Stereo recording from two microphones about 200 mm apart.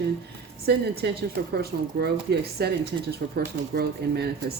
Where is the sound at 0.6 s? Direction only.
55° right (ahead or behind).